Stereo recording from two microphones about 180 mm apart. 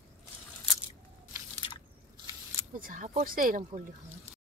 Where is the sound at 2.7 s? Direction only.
50° right (ahead or behind).